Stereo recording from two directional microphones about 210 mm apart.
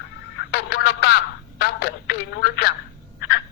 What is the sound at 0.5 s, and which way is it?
Telephone, 50° left (ahead or behind).